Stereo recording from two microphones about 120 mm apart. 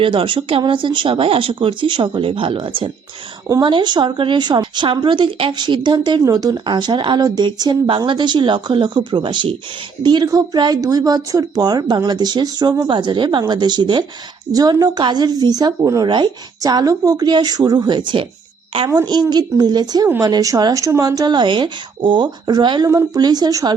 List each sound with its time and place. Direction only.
0.0 s a woman's voice: 45° right (ahead or behind); by 12.9 s 30° right (ahead or behind)
12.9 s a woman's voice: 40° right (ahead or behind)